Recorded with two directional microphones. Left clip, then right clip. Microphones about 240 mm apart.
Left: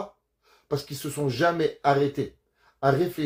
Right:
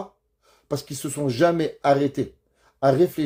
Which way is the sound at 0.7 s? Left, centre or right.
Right.